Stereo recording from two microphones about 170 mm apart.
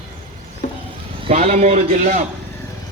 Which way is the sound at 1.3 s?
40° right (ahead or behind).